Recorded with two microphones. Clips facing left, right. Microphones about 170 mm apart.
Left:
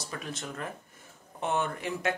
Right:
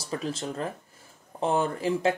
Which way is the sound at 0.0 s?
30° right (ahead or behind).